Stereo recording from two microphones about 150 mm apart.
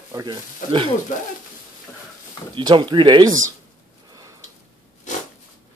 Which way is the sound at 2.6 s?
30° right (ahead or behind).